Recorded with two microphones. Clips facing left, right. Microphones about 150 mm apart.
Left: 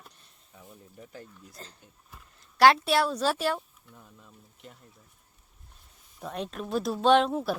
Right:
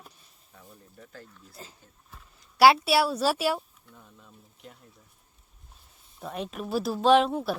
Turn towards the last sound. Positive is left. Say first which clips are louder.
# right 1 dB
turn(degrees=0)  # may be behind; listen again after turning